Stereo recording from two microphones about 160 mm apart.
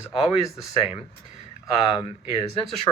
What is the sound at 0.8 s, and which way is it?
Speech, 40° left (ahead or behind).